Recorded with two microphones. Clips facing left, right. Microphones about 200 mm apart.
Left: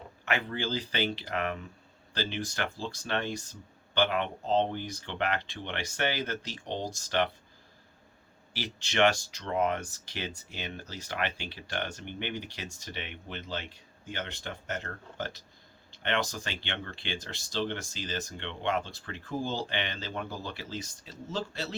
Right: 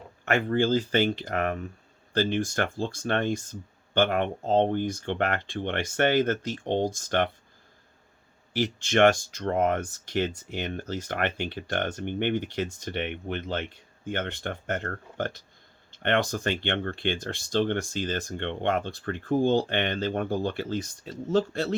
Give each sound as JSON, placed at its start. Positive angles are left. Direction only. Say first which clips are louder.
{"t": 0.3, "sound": "speech", "louder": "right 9 dB", "side_deg": -50}
{"t": 8.5, "sound": "speech", "louder": "right 6 dB", "side_deg": -50}